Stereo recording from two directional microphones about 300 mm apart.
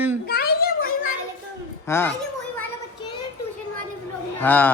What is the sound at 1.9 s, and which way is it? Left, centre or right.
Speech, centre.